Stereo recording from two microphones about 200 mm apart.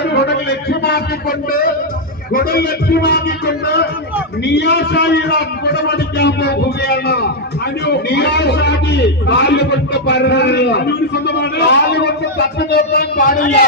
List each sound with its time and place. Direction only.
0.0 s a man's voice: 55° left (ahead or behind)